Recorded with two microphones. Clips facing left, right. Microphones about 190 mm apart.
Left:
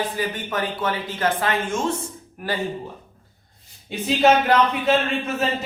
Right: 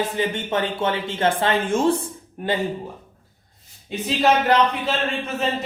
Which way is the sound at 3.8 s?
Centre (ahead or behind).